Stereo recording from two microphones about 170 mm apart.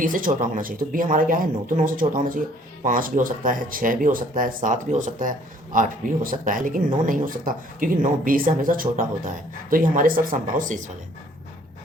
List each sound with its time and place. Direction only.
0.0 s speech: 55° right (ahead or behind)